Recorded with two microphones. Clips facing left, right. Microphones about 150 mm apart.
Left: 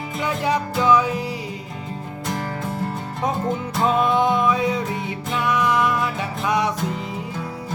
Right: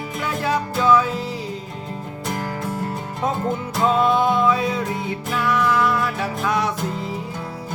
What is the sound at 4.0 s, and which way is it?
Music, 15° left (ahead or behind).